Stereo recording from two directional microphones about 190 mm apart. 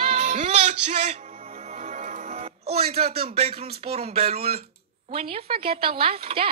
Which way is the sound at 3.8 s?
35° right (ahead or behind).